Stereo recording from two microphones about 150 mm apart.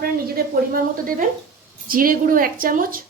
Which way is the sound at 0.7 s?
70° right (ahead or behind).